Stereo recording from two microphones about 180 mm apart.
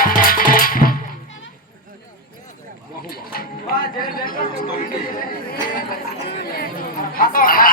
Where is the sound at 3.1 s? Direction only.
55° left (ahead or behind).